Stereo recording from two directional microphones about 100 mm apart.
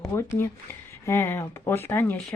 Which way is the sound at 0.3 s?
25° left (ahead or behind).